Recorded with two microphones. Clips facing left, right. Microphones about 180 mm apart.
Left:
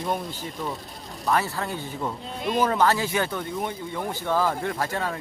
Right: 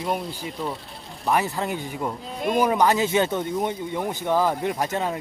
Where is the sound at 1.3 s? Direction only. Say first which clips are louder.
Right 2 dB; 15° right (ahead or behind).